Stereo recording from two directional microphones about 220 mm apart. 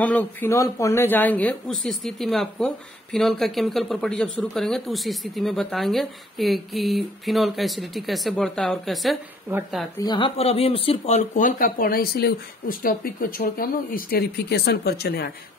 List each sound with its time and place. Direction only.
0.0 s speech: 5° left (ahead or behind)
9.9 s speech: 20° left (ahead or behind); by 15.3 s 45° left (ahead or behind)